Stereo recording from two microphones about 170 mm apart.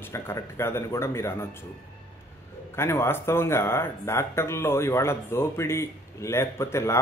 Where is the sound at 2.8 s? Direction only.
15° left (ahead or behind).